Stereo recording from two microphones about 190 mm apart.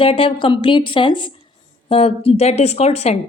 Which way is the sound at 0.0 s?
30° left (ahead or behind).